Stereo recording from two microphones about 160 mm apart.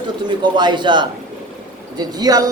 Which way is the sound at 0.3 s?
30° right (ahead or behind).